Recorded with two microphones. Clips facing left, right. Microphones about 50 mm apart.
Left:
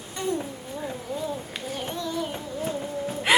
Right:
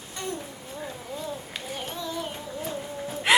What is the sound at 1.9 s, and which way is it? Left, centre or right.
Music, centre.